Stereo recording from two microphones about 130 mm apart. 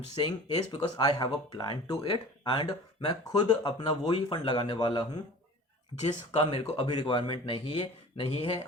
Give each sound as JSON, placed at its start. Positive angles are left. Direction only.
{"t": 0.2, "sound": "speech", "side_deg": 40}
{"t": 6.4, "sound": "speech", "side_deg": 40}